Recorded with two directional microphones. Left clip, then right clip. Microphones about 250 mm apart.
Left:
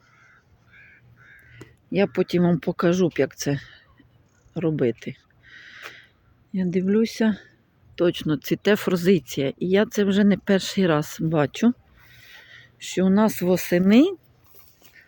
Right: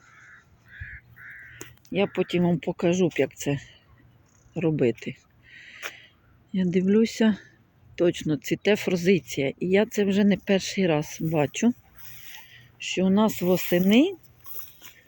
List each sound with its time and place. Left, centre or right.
1.2 s crow: left
2.6 s speech: centre
4.5 s speech: centre
5.8 s wheeze: centre
6.5 s speech: centre
7.9 s speech: centre
12.4 s a sound: left
12.8 s speech: centre